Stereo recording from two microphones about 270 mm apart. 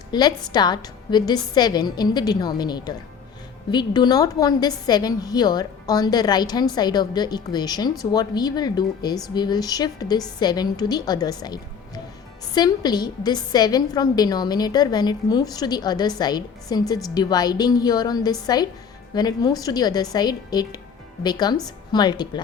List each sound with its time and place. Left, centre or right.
0.1 s a woman's voice: centre